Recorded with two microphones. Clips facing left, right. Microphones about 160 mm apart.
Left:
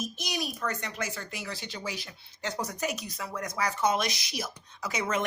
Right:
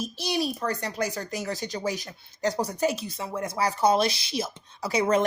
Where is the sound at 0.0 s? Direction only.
30° right (ahead or behind).